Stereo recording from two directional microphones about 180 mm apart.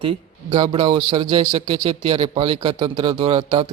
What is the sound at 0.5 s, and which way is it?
Speech, 30° right (ahead or behind).